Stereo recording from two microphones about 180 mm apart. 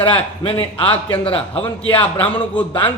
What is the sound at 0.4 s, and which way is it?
Speech, 30° left (ahead or behind).